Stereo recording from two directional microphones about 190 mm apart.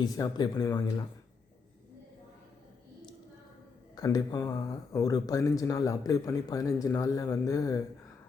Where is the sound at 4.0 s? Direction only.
20° left (ahead or behind).